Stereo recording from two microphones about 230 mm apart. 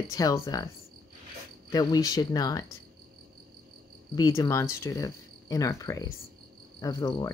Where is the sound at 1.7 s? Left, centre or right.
Centre.